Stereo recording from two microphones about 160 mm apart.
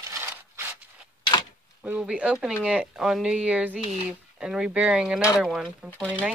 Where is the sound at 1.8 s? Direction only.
10° right (ahead or behind).